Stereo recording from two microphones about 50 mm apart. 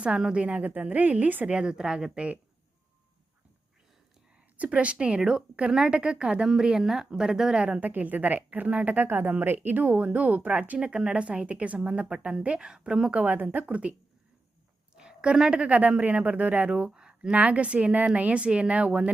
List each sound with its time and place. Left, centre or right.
0.3 s a woman's voice: right
1.5 s speech: centre
4.5 s a woman's voice: right
7.6 s a woman's voice: right
13.1 s a woman's voice: right
14.9 s a woman's voice: centre